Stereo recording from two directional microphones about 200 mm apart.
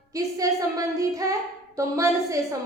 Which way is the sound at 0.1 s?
15° right (ahead or behind).